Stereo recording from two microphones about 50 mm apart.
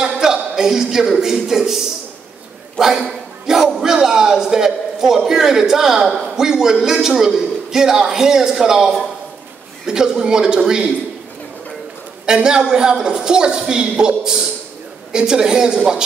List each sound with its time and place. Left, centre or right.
0.0 s a sound: centre
1.2 s a man's voice: centre
2.8 s a man's voice: centre
12.3 s a man's voice: centre